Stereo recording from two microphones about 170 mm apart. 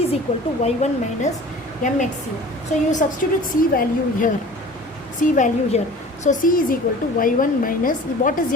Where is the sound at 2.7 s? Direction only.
45° left (ahead or behind).